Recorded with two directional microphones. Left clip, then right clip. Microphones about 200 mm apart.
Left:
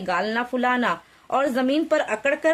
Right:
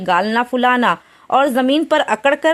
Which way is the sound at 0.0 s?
40° right (ahead or behind).